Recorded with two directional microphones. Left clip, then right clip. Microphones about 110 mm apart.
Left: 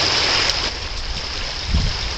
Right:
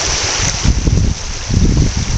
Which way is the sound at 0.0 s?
45° right (ahead or behind).